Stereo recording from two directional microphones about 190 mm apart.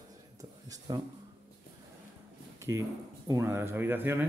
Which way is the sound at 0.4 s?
20° right (ahead or behind).